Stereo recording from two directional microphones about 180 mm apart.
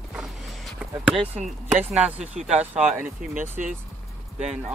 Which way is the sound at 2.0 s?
5° right (ahead or behind).